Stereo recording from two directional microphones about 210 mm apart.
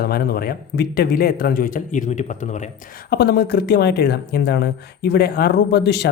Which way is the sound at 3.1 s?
50° left (ahead or behind).